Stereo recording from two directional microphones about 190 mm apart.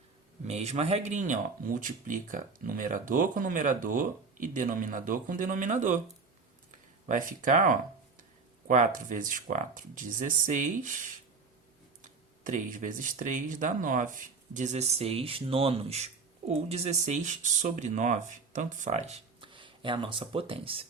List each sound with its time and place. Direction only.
0.4 s speech: 35° right (ahead or behind)
7.1 s speech: 45° right (ahead or behind)